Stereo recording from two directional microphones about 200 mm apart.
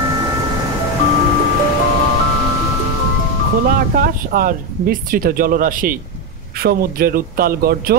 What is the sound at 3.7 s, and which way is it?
Speech, 45° right (ahead or behind).